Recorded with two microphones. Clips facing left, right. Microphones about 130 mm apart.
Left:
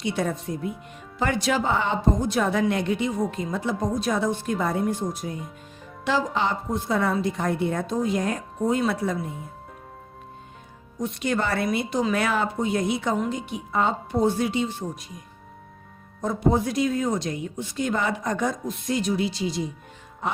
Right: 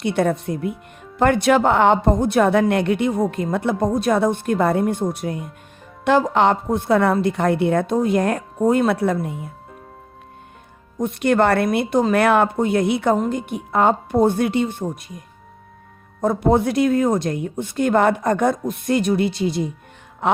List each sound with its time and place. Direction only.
0.0 s a woman's voice: 60° right (ahead or behind)
10.9 s a woman's voice: 55° right (ahead or behind)
13.1 s a woman's voice: 50° right (ahead or behind)
16.2 s a woman's voice: 60° right (ahead or behind)
20.2 s music: 75° right (ahead or behind)